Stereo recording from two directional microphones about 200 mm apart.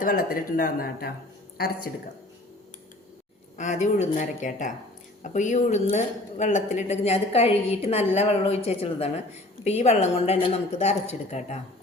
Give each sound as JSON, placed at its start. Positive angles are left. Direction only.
{"t": 0.0, "sound": "speech", "side_deg": 45}
{"t": 3.6, "sound": "speech", "side_deg": 35}